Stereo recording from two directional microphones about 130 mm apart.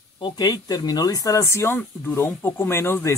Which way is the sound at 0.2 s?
30° left (ahead or behind).